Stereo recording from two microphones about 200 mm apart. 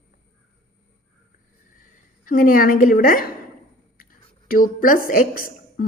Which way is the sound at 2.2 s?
45° left (ahead or behind).